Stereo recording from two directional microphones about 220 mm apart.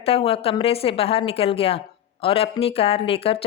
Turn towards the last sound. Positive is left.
turn(degrees=25)  # may be behind; listen again after turning